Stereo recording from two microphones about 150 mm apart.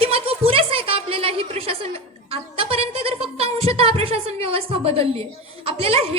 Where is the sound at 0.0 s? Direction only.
40° right (ahead or behind).